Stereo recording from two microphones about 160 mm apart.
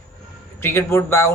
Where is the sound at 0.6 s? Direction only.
15° left (ahead or behind).